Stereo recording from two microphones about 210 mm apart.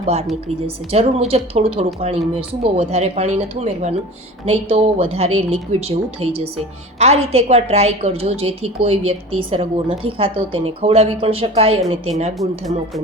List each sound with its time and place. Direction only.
0.0 s a woman's voice: 30° right (ahead or behind)
12.4 s speech: centre (ahead or behind)